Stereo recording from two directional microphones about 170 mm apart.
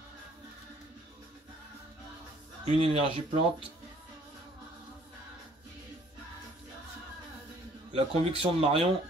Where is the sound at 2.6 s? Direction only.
35° right (ahead or behind).